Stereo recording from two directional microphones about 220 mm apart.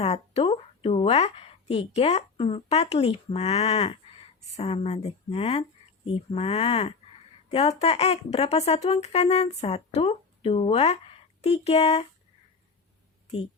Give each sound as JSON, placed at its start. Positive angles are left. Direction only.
{"t": 0.0, "sound": "a woman's voice", "side_deg": 30}